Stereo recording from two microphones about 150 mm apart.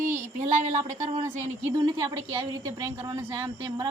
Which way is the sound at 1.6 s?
35° right (ahead or behind).